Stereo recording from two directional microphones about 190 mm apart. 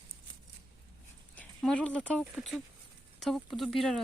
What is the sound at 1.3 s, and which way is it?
Speech, 5° left (ahead or behind).